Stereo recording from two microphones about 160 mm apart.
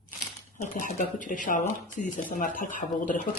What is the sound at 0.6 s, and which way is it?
Speech, 55° left (ahead or behind).